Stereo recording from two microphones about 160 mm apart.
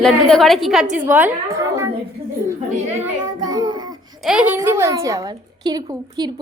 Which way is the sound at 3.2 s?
25° right (ahead or behind).